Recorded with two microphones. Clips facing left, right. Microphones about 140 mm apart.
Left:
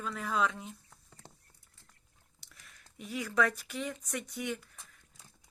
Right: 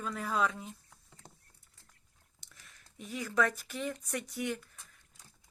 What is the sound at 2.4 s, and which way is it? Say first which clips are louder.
Speech: left 1 dB; centre (ahead or behind).